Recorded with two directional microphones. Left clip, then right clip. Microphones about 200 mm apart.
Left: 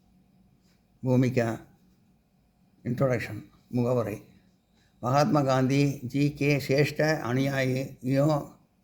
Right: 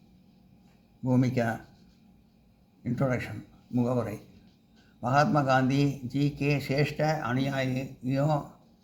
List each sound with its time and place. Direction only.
1.0 s a man's voice: 45° left (ahead or behind)
2.8 s a man's voice: 45° left (ahead or behind)